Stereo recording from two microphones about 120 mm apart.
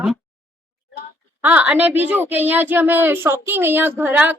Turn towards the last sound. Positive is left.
turn(degrees=-15)  # may be behind; listen again after turning